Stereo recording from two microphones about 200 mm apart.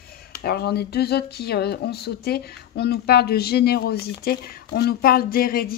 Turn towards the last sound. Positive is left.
turn(degrees=50)  # may be behind; listen again after turning